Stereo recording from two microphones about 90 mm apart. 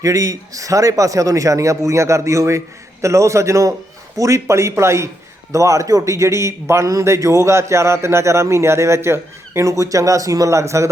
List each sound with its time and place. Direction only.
0.0 s a man's voice: 40° right (ahead or behind)